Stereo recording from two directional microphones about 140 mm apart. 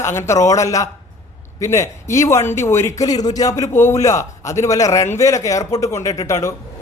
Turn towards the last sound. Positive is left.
turn(degrees=20)  # may be behind; listen again after turning